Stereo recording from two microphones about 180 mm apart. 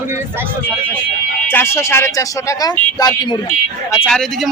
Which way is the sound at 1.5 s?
15° left (ahead or behind).